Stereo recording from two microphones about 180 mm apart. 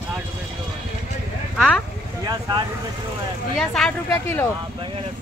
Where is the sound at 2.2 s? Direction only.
20° right (ahead or behind).